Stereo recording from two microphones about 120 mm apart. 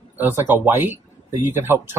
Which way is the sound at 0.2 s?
20° right (ahead or behind).